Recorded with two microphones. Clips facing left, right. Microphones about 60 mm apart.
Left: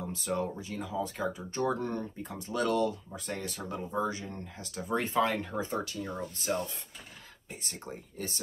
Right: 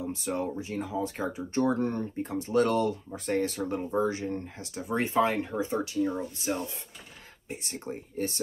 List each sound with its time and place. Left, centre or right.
0.1 s speech: right
5.9 s speech: centre
7.8 s speech: right